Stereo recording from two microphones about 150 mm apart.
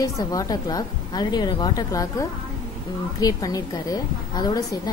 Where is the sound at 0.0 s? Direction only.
25° left (ahead or behind).